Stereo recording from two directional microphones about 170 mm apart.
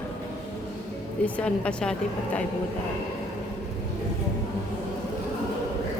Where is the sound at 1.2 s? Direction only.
5° left (ahead or behind).